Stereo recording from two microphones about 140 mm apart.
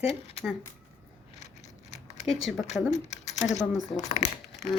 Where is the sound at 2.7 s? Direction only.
55° left (ahead or behind).